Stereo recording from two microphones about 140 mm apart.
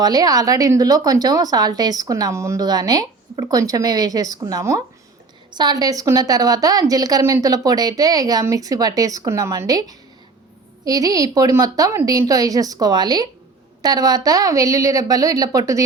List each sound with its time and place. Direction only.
0.0 s speech: 25° right (ahead or behind)